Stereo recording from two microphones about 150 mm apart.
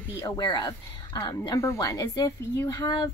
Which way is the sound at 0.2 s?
30° left (ahead or behind).